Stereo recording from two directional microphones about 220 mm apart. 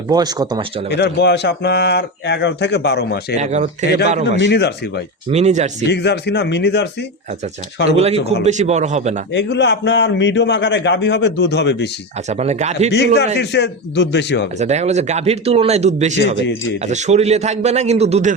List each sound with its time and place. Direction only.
0.1 s speech: 20° right (ahead or behind)
0.9 s a man's voice: 50° left (ahead or behind)
3.3 s speech: 30° right (ahead or behind)
4.4 s a man's voice: 50° left (ahead or behind)
5.3 s speech: 30° right (ahead or behind)
5.9 s a man's voice: 50° left (ahead or behind)
7.9 s speech: 30° right (ahead or behind)
9.3 s a man's voice: 50° left (ahead or behind)
12.3 s speech: 30° right (ahead or behind)
13.4 s a man's voice: 50° left (ahead or behind)
14.6 s speech: 30° right (ahead or behind)